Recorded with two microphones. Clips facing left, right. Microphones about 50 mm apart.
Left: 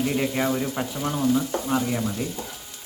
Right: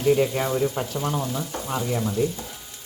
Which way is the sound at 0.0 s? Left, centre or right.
Centre.